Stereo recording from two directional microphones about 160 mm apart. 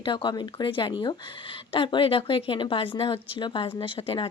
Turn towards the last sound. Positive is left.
turn(degrees=35)  # may be behind; listen again after turning